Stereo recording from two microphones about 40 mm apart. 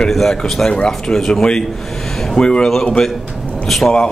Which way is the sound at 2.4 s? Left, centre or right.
Left.